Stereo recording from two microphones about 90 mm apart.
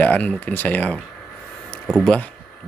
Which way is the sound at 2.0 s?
15° left (ahead or behind).